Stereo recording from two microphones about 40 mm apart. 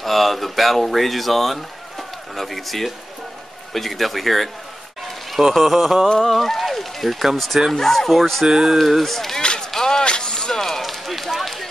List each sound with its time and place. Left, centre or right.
0.0 s speech: centre
5.5 s speech: centre
7.7 s speech: centre
8.5 s speech: centre
9.4 s a sound: left
10.0 s run: left; by 11.7 s centre